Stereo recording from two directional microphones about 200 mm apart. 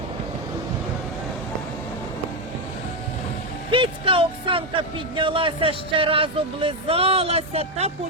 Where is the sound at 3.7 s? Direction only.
25° right (ahead or behind).